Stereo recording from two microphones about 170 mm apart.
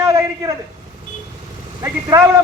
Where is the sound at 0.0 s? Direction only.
20° right (ahead or behind).